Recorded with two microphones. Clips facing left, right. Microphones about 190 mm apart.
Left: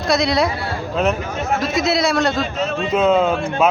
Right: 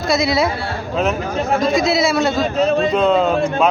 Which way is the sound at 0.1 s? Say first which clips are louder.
Even; centre (ahead or behind).